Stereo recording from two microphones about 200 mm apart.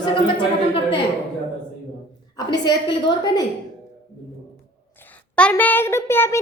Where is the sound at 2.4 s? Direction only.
20° left (ahead or behind).